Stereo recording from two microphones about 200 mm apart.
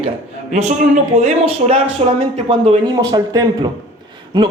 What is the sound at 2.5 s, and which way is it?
A man's voice, 20° right (ahead or behind).